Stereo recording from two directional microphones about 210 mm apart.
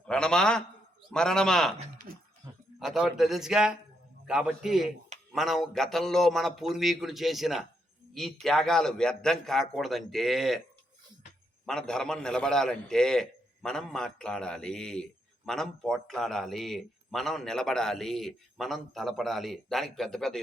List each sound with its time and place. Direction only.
0.1 s a man's voice: 5° left (ahead or behind)
2.1 s a sound: 45° right (ahead or behind)
2.7 s a man's voice: centre (ahead or behind)
11.6 s a man's voice: 5° left (ahead or behind)